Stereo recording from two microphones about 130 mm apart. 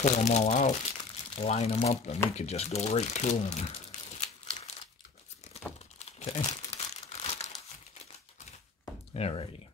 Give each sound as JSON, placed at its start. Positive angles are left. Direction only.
{"t": 0.0, "sound": "speech", "side_deg": 60}
{"t": 4.2, "sound": "crumpling", "side_deg": 60}
{"t": 9.1, "sound": "speech", "side_deg": 50}